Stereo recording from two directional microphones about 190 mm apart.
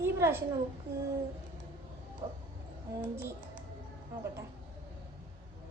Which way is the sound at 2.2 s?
20° right (ahead or behind).